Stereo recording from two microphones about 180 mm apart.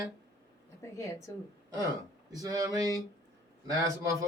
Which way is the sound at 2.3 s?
20° right (ahead or behind).